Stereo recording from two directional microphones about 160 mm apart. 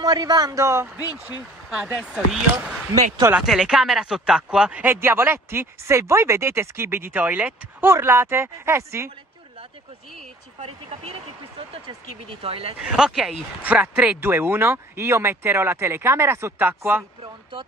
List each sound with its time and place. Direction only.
0.0 s speech: 25° right (ahead or behind)
1.7 s speech: 5° right (ahead or behind)
2.9 s speech: 15° right (ahead or behind)
3.3 s speech: 5° right (ahead or behind)
12.3 s speech: 35° right (ahead or behind)
12.9 s speech: 5° right (ahead or behind)
17.2 s speech: 30° right (ahead or behind)